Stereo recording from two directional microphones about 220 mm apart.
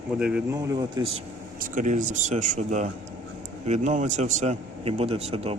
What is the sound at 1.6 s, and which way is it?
A man's voice, 35° right (ahead or behind).